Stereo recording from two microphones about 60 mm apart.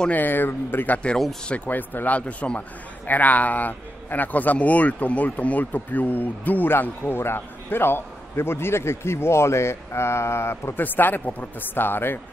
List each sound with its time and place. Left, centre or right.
0.1 s a man's voice: left
10.8 s a man's voice: left